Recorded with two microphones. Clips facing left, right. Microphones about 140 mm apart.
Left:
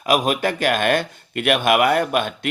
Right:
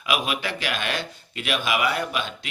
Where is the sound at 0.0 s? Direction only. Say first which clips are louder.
Left 7 dB; 45° left (ahead or behind).